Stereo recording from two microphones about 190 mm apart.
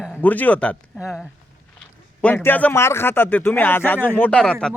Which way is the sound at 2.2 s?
10° left (ahead or behind).